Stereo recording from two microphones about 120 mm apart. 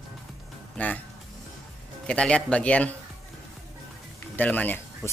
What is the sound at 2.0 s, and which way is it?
Speech, 10° left (ahead or behind).